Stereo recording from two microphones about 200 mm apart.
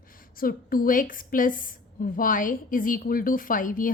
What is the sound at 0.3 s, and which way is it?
A woman's voice, 45° left (ahead or behind).